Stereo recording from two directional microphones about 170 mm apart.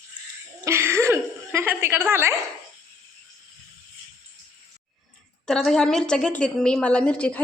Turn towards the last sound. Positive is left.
turn(degrees=5)  # may be behind; listen again after turning